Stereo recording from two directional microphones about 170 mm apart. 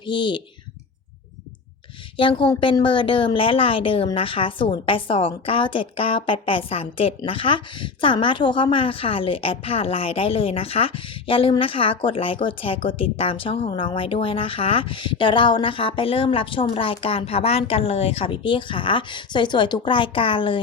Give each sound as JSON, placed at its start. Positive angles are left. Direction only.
{"t": 0.0, "sound": "speech", "side_deg": 30}
{"t": 2.1, "sound": "a woman's voice", "side_deg": 30}